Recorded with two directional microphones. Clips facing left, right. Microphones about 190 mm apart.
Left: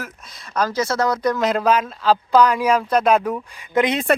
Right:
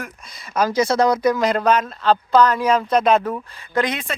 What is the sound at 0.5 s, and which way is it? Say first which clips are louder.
Speech: right 3 dB; 10° right (ahead or behind).